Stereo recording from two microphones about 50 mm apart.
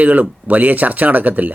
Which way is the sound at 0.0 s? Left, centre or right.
Right.